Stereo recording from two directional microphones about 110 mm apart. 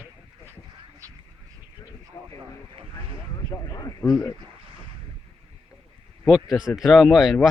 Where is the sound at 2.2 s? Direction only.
40° left (ahead or behind).